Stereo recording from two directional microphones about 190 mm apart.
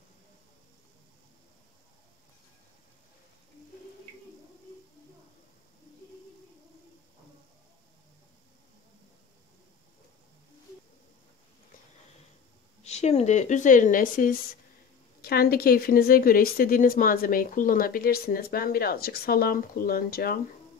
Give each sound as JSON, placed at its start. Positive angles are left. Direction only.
{"t": 12.8, "sound": "a woman's voice", "side_deg": 35}